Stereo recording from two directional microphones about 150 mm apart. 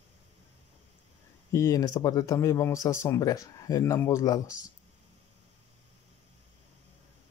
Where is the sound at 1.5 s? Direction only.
20° left (ahead or behind).